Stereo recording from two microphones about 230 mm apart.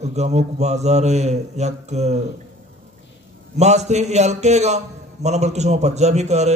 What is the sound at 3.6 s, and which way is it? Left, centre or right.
Speech, right.